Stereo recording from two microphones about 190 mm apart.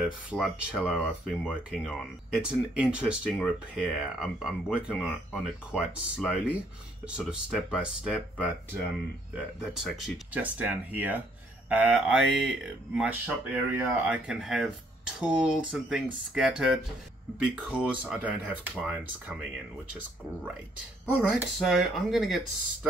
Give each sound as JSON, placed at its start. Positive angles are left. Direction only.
{"t": 0.0, "sound": "speech", "side_deg": -5}
{"t": 0.9, "sound": "speech", "side_deg": 10}
{"t": 1.7, "sound": "speech", "side_deg": -5}
{"t": 9.6, "sound": "speech", "side_deg": 0}
{"t": 21.2, "sound": "speech", "side_deg": 0}